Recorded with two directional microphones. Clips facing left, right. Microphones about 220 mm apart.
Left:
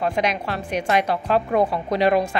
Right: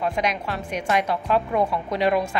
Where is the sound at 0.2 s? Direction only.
30° left (ahead or behind).